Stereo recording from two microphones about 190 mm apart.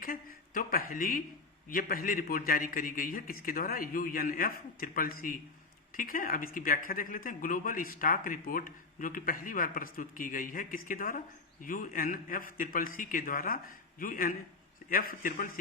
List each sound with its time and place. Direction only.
0.0 s speech: 50° left (ahead or behind)